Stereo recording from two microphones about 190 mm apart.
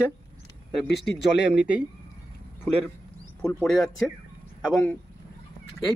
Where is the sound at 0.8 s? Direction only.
65° left (ahead or behind).